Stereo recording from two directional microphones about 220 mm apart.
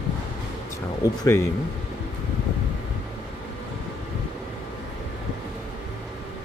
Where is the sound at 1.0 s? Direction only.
15° left (ahead or behind).